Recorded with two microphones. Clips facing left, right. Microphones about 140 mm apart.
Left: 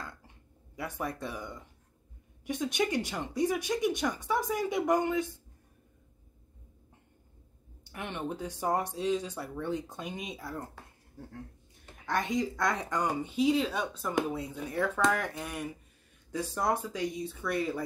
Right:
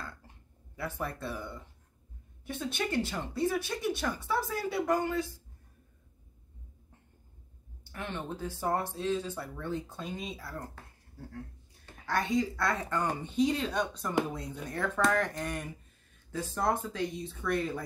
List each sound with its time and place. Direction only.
0.7 s speech: 15° left (ahead or behind)
7.8 s speech: 15° left (ahead or behind)
11.8 s speech: 20° left (ahead or behind)